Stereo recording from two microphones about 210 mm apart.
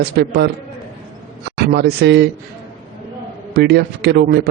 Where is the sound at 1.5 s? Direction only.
55° right (ahead or behind).